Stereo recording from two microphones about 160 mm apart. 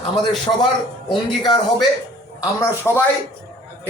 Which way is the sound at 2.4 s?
15° left (ahead or behind).